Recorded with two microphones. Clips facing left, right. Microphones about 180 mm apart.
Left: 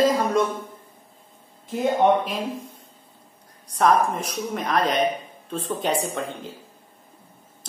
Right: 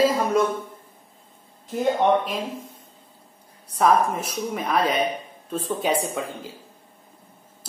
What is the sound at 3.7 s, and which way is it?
A woman's voice, 5° right (ahead or behind).